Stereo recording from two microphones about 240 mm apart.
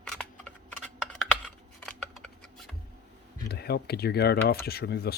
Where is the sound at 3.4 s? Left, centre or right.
Left.